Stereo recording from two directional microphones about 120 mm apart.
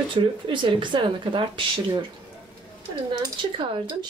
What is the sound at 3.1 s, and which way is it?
Speech, 40° right (ahead or behind).